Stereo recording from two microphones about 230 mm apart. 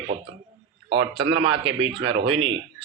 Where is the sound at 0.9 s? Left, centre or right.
Right.